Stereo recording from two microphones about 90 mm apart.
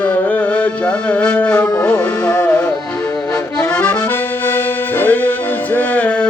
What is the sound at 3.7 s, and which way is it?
Accordion, 15° left (ahead or behind).